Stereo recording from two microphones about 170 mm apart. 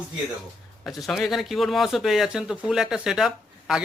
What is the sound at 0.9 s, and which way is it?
Speech, centre (ahead or behind).